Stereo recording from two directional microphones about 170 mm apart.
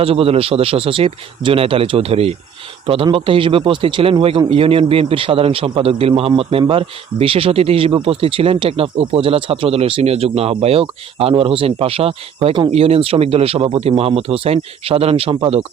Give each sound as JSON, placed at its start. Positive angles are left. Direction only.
{"t": 0.0, "sound": "a man's voice", "side_deg": -35}